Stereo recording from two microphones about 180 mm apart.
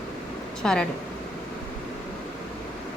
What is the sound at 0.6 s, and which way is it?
Speech, 5° left (ahead or behind).